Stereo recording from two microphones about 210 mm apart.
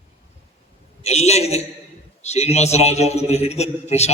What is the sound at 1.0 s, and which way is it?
A man's voice, 30° left (ahead or behind).